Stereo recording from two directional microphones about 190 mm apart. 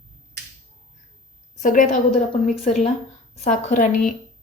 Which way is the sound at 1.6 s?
45° left (ahead or behind).